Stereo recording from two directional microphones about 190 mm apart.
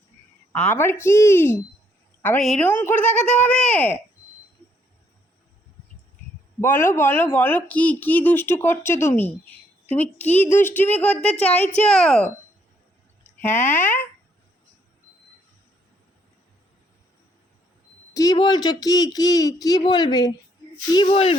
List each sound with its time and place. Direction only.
0.5 s speech: 10° left (ahead or behind)
6.9 s speech: 10° left (ahead or behind)
13.4 s speech: 10° left (ahead or behind)
18.1 s speech: 20° left (ahead or behind)